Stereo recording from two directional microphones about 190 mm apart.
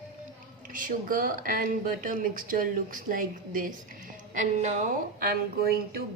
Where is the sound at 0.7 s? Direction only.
45° right (ahead or behind).